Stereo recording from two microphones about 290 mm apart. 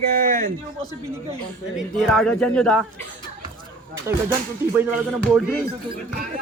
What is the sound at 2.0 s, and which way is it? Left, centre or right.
Speech, centre.